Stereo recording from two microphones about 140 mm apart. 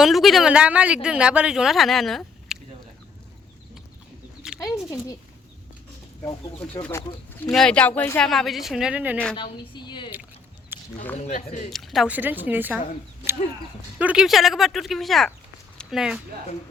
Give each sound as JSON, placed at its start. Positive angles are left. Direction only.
{"t": 0.0, "sound": "speech", "side_deg": 0}
{"t": 4.4, "sound": "a sound", "side_deg": -5}
{"t": 7.5, "sound": "speech", "side_deg": 5}
{"t": 8.3, "sound": "speech", "side_deg": 0}
{"t": 9.3, "sound": "a woman's voice", "side_deg": 35}
{"t": 10.7, "sound": "a sound", "side_deg": -15}
{"t": 11.3, "sound": "speech", "side_deg": 55}
{"t": 11.7, "sound": "speech", "side_deg": 0}
{"t": 12.0, "sound": "a woman's voice", "side_deg": -10}
{"t": 14.0, "sound": "speech", "side_deg": -5}